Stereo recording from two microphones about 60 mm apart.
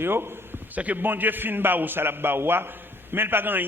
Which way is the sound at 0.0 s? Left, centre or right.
Right.